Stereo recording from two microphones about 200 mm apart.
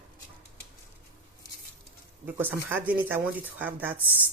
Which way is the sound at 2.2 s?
10° right (ahead or behind).